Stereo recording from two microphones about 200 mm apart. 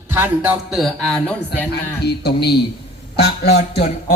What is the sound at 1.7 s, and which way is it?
A man's voice, 55° left (ahead or behind).